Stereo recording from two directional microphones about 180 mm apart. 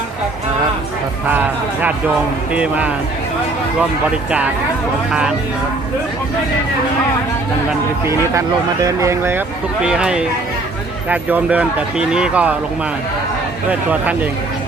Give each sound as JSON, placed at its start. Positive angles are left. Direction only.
{"t": 2.5, "sound": "speech", "side_deg": -10}
{"t": 8.0, "sound": "speech", "side_deg": -15}
{"t": 13.7, "sound": "speech", "side_deg": -10}